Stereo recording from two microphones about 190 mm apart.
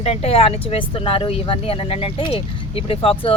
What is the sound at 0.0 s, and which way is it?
Speech, 30° left (ahead or behind).